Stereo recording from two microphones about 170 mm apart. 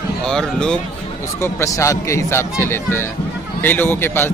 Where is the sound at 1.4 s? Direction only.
15° left (ahead or behind).